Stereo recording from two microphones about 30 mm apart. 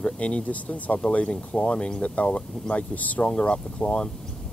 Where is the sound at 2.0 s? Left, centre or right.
Left.